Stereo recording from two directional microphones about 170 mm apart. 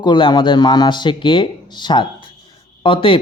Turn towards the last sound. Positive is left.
turn(degrees=30)  # may be behind; listen again after turning